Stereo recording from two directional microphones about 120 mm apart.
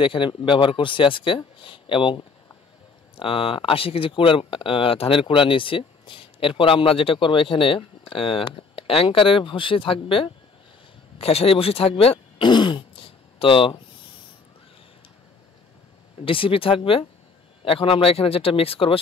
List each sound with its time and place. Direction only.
0.0 s speech: 45° left (ahead or behind)
11.1 s throat clearing: 55° left (ahead or behind)
16.3 s speech: 50° left (ahead or behind)